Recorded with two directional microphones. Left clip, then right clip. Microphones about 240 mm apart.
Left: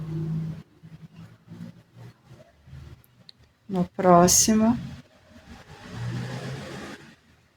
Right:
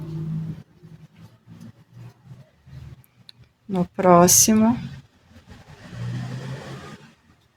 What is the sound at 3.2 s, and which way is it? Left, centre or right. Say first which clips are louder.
Speech: right 4 dB; centre.